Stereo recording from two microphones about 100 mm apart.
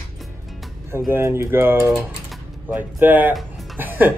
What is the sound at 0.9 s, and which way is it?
Speech, 25° right (ahead or behind).